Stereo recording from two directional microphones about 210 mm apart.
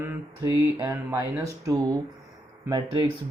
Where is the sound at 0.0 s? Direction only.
15° right (ahead or behind).